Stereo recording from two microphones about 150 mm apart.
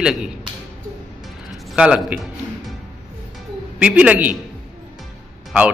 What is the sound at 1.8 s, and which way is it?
Speech, 5° right (ahead or behind).